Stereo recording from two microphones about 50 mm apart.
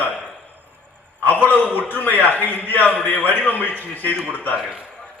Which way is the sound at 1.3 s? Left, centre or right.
Left.